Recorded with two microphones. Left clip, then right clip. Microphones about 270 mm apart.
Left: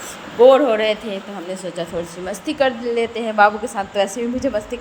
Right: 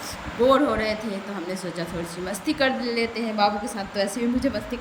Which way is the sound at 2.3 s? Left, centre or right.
Centre.